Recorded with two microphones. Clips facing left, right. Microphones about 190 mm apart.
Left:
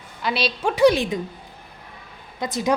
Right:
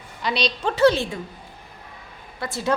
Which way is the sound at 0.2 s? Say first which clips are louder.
Left 1 dB; 5° left (ahead or behind).